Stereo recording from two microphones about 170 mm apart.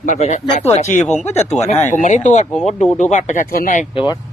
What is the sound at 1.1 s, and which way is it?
Speech, 40° left (ahead or behind).